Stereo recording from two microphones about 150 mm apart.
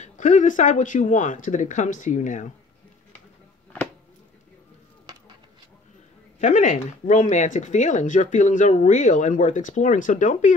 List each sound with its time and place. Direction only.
0.0 s speech: 55° left (ahead or behind)
6.4 s speech: 60° left (ahead or behind)